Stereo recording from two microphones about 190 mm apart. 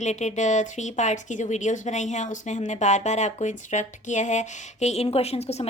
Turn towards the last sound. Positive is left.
turn(degrees=35)  # may be behind; listen again after turning